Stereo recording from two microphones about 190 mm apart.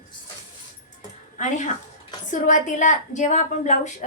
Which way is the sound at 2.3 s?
40° left (ahead or behind).